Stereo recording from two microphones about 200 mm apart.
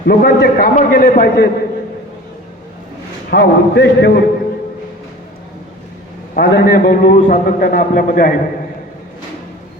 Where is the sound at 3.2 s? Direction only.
55° left (ahead or behind).